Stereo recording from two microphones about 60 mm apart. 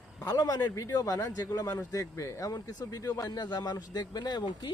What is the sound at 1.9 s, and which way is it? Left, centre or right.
Speech, left.